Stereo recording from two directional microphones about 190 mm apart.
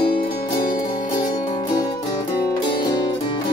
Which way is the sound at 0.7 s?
25° left (ahead or behind).